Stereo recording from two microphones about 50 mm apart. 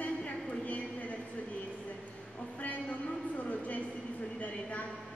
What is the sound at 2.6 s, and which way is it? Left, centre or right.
A man's voice, left.